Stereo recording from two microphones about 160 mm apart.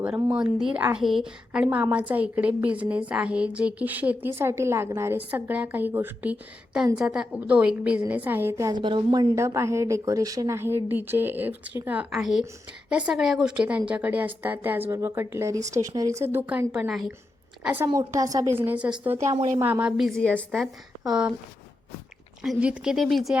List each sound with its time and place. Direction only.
0.0 s a woman's voice: 5° right (ahead or behind)
17.8 s a woman's voice: 30° right (ahead or behind)
20.0 s a woman's voice: 5° left (ahead or behind)
22.4 s a woman's voice: 5° right (ahead or behind)